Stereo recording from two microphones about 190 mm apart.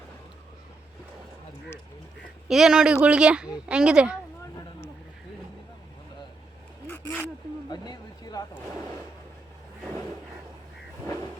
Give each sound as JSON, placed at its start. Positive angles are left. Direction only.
{"t": 2.5, "sound": "speech", "side_deg": -5}
{"t": 6.9, "sound": "a sound", "side_deg": 10}
{"t": 7.7, "sound": "speech", "side_deg": 20}